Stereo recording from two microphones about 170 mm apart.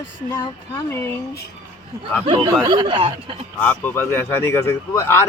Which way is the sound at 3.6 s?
10° left (ahead or behind).